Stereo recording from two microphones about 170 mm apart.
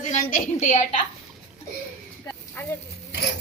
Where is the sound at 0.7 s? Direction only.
45° left (ahead or behind).